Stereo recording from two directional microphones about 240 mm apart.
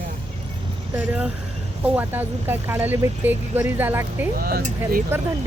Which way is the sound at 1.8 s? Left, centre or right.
Centre.